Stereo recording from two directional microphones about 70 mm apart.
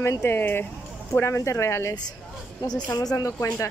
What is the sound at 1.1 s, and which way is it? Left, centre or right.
Speech, left.